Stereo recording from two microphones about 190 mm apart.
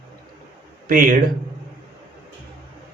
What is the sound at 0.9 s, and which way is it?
Speech, 45° right (ahead or behind).